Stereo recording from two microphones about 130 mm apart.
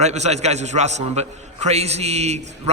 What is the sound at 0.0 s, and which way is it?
A man's voice, 60° right (ahead or behind).